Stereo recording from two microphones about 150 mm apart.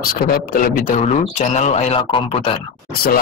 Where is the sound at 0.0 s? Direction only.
75° left (ahead or behind); by 2.6 s 35° left (ahead or behind).